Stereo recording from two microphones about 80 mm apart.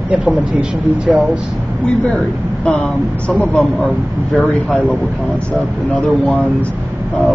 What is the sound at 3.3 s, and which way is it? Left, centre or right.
Speech, centre.